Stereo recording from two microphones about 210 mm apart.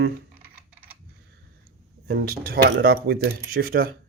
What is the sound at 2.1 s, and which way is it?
Speech, 45° right (ahead or behind).